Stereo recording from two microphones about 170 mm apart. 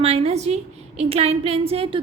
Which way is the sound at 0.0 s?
35° right (ahead or behind).